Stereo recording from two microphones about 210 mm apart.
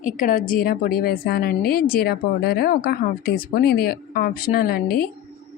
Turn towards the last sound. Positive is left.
turn(degrees=45)  # may be behind; listen again after turning